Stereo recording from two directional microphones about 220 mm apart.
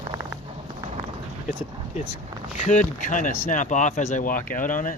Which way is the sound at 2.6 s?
35° left (ahead or behind).